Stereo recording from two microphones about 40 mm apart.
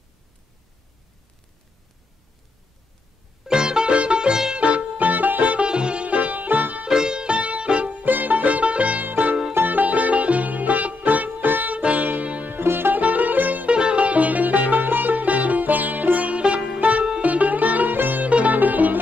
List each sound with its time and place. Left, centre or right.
3.4 s music: centre
4.6 s music: right
5.7 s music: right
6.9 s music: centre
7.3 s music: right
8.0 s music: right
11.7 s music: right
12.4 s music: right
12.9 s music: right
13.7 s music: right